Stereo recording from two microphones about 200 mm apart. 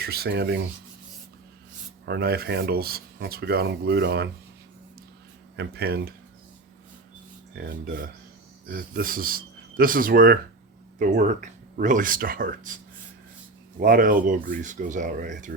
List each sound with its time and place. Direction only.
0.0 s rub: 50° right (ahead or behind)
2.0 s speech: 55° right (ahead or behind)
5.5 s speech: 55° right (ahead or behind)
7.6 s speech: 45° right (ahead or behind)